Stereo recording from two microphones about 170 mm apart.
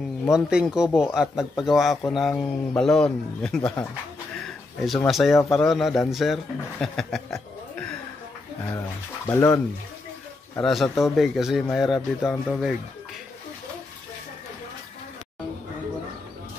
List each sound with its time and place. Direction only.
0.3 s a man's voice: 5° right (ahead or behind)
4.8 s a man's voice: centre (ahead or behind)
8.6 s speech: 15° left (ahead or behind)
10.6 s a man's voice: centre (ahead or behind)
12.3 s speech: 10° left (ahead or behind)